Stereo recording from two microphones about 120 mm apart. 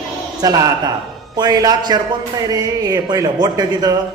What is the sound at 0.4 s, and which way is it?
A man's voice, 30° right (ahead or behind).